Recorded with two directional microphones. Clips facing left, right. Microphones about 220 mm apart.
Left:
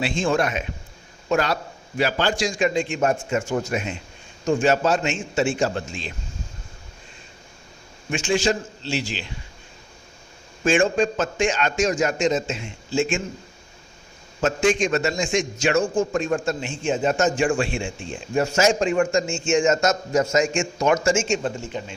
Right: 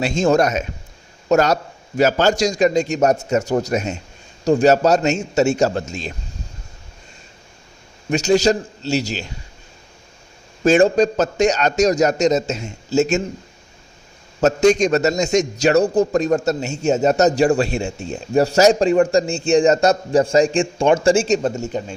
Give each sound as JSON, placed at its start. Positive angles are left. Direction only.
{"t": 0.0, "sound": "a man's voice", "side_deg": -40}
{"t": 8.1, "sound": "a man's voice", "side_deg": -40}
{"t": 10.6, "sound": "a man's voice", "side_deg": -40}
{"t": 14.4, "sound": "a man's voice", "side_deg": -40}